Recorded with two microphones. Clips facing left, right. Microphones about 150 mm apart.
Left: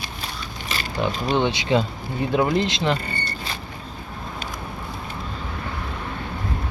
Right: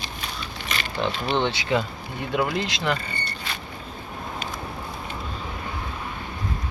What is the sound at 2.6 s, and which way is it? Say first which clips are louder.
Speech: left 3 dB; 25° left (ahead or behind).